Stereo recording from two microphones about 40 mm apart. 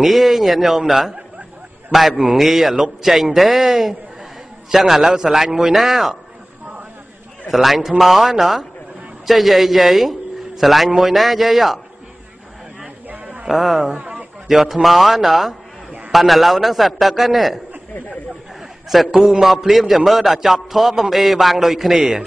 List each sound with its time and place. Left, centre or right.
0.0 s a man's voice: centre
7.4 s a man's voice: centre
13.1 s a sound: right
13.5 s a man's voice: centre
13.9 s a sound: right
14.5 s a man's voice: centre
18.9 s a man's voice: centre